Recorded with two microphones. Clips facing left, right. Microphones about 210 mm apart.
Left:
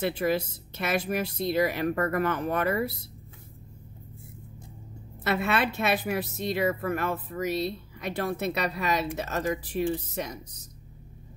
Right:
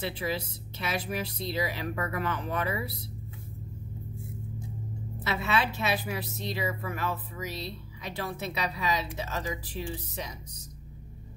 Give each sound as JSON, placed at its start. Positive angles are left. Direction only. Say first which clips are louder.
{"t": 0.0, "sound": "speech", "louder": "left 6 dB", "side_deg": 50}
{"t": 5.2, "sound": "speech", "louder": "left 3 dB", "side_deg": 55}